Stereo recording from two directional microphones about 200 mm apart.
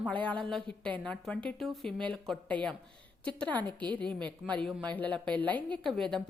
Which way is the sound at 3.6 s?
20° right (ahead or behind).